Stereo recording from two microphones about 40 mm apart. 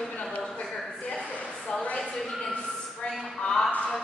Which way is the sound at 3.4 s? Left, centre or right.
Left.